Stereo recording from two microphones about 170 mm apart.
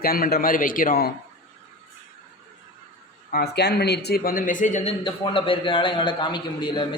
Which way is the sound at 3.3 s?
70° left (ahead or behind).